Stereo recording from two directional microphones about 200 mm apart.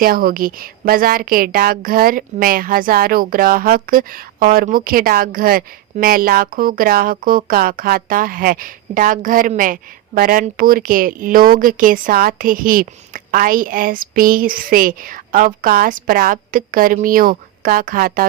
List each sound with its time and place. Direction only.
0.0 s a woman's voice: 45° right (ahead or behind)